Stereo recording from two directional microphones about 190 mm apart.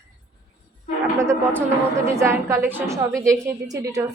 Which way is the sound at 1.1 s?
15° right (ahead or behind).